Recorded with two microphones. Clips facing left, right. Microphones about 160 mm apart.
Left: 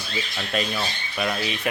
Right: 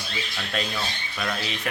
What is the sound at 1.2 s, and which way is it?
Speech, 10° left (ahead or behind).